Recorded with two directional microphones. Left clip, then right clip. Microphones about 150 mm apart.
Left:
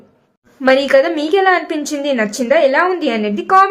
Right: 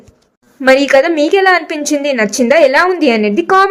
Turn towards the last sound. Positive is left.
turn(degrees=-35)  # may be behind; listen again after turning